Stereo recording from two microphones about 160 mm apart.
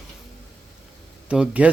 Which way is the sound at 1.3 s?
10° right (ahead or behind).